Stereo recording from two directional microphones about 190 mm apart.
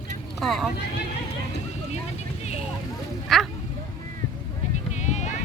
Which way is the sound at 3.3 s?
Centre (ahead or behind).